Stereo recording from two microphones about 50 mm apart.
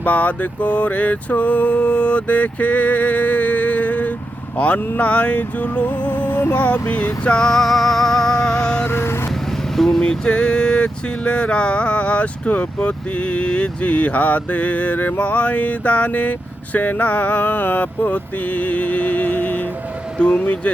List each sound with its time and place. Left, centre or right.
0.0 s a sound: left
7.3 s music: centre
7.5 s music: centre
8.8 s vehicle: left
9.7 s speech: centre
10.0 s a sound: centre